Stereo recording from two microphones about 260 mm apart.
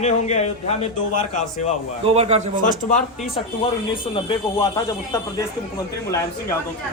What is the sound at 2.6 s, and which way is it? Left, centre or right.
A man's voice, left.